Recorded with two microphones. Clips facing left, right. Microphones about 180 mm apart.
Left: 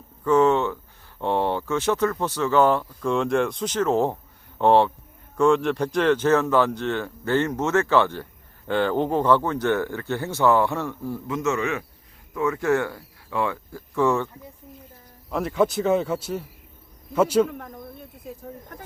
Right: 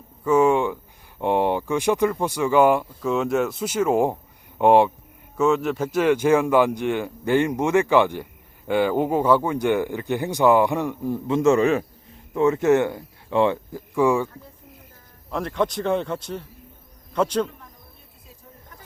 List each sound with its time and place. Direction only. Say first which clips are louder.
0.3 s speech: right 1 dB; 10° right (ahead or behind)
11.3 s a man's voice: right 8 dB; 30° right (ahead or behind)
13.9 s speech: right 2 dB; 10° right (ahead or behind)
15.3 s a man's voice: left 2 dB; 5° left (ahead or behind)